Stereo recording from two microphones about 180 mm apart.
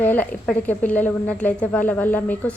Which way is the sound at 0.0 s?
10° left (ahead or behind).